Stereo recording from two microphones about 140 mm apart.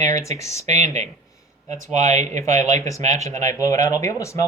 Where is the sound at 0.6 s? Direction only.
50° right (ahead or behind).